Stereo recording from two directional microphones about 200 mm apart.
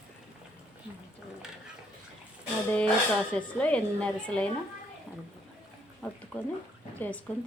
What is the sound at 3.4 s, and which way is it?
A woman's voice, 5° left (ahead or behind).